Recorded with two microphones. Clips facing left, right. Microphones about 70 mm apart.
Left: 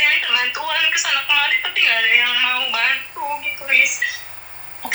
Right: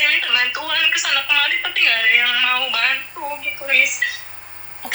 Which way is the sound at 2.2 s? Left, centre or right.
Right.